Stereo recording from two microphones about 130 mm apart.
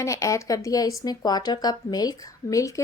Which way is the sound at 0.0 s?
25° left (ahead or behind).